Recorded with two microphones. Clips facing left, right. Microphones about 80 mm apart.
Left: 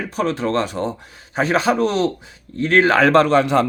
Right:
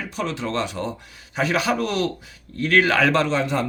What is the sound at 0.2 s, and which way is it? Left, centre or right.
A man's voice, left.